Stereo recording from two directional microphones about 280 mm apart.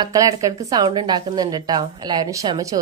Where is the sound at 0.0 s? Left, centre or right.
Centre.